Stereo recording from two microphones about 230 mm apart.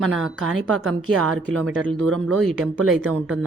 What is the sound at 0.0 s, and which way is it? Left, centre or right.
Speech, right.